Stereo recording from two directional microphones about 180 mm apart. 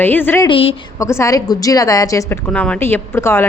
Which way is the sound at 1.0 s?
15° left (ahead or behind).